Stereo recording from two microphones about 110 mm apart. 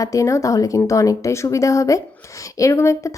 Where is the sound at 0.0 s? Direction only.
30° left (ahead or behind).